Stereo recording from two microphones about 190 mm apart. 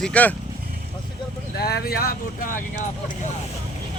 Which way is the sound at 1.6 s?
55° left (ahead or behind).